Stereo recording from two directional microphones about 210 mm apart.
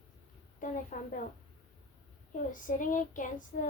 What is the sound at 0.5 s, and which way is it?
Speech, 40° left (ahead or behind).